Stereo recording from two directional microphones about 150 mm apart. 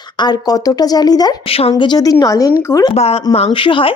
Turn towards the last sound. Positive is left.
turn(degrees=35)  # may be behind; listen again after turning